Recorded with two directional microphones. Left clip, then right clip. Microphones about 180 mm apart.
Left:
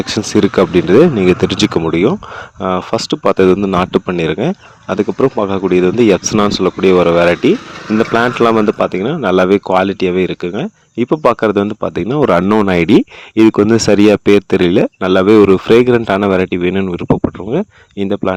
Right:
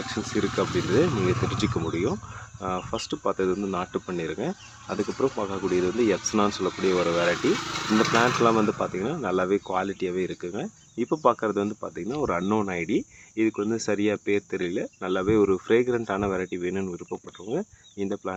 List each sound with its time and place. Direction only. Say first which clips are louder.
0.1 s speech: left 15 dB; 60° left (ahead or behind)